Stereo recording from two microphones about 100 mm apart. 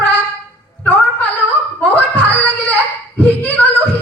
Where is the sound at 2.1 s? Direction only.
15° left (ahead or behind).